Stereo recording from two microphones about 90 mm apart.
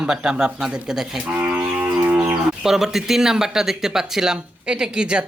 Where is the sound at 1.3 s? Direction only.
15° right (ahead or behind).